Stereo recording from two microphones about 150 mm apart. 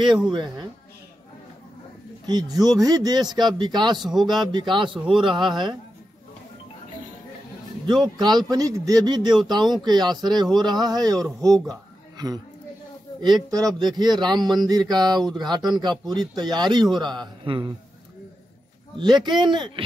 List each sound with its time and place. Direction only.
0.3 s speech: 30° right (ahead or behind)
2.2 s a man's voice: 25° right (ahead or behind)
7.8 s speech: 30° right (ahead or behind)
13.5 s speech: 25° right (ahead or behind)
18.9 s a man's voice: 30° right (ahead or behind)